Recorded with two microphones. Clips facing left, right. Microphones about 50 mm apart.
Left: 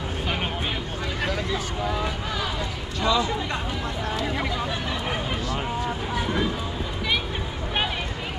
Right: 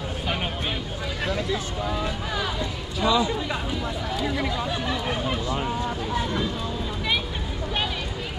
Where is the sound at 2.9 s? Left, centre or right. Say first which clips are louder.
Right 1 dB; centre.